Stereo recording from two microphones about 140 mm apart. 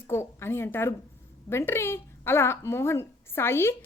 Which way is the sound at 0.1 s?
20° left (ahead or behind).